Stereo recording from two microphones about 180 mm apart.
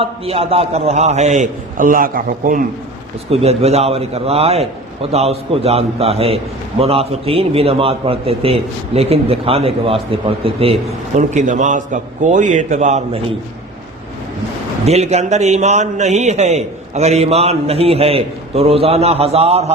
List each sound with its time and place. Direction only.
0.0 s a man's voice: 30° right (ahead or behind); by 2.6 s 50° right (ahead or behind)
3.2 s a man's voice: 35° right (ahead or behind)
14.8 s a man's voice: 35° right (ahead or behind)